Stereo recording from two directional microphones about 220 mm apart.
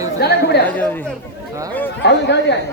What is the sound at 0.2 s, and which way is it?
Chatter, 45° left (ahead or behind).